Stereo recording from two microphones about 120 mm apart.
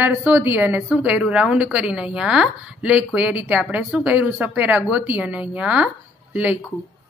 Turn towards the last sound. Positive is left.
turn(degrees=-10)  # may be behind; listen again after turning